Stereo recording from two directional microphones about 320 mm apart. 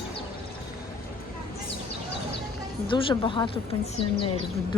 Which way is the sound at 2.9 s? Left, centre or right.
Centre.